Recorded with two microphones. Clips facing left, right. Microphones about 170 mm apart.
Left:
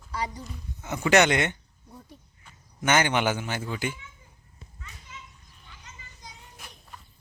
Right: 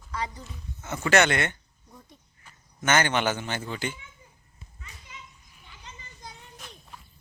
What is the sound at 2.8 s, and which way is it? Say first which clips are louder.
Speech: left 1 dB; 15° left (ahead or behind).